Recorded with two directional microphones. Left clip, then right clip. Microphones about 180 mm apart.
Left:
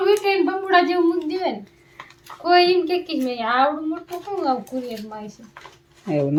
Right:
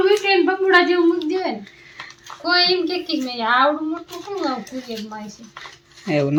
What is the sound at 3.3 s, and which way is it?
Speech, 25° left (ahead or behind).